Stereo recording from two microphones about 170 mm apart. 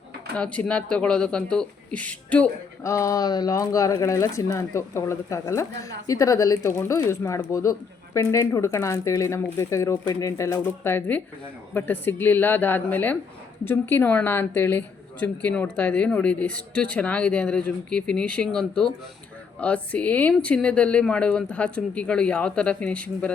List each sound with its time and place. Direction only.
0.3 s speech: 5° left (ahead or behind)